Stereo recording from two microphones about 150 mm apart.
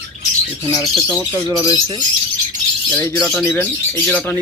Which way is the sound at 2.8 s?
10° left (ahead or behind).